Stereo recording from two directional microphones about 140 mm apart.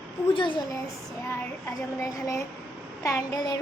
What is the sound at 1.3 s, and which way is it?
A child's voice, 20° left (ahead or behind).